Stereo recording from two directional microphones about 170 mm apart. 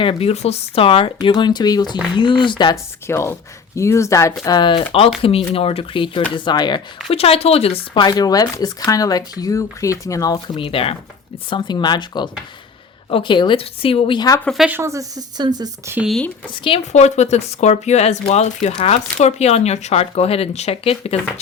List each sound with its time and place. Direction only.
0.0 s speech: 35° left (ahead or behind)
3.1 s speech: 15° left (ahead or behind)
14.4 s a woman's voice: centre (ahead or behind)
14.7 s speech: 15° right (ahead or behind)
16.0 s a woman's voice: centre (ahead or behind)
16.6 s speech: 35° left (ahead or behind)